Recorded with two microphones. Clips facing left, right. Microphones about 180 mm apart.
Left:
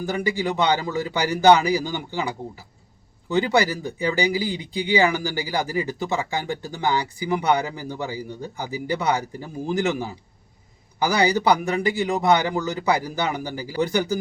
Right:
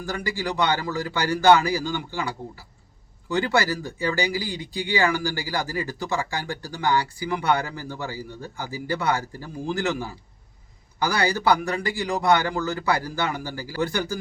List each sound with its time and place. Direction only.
0.3 s a man's voice: 20° left (ahead or behind)